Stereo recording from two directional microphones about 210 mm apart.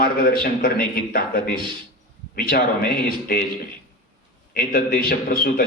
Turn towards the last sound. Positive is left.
turn(degrees=45)  # may be behind; listen again after turning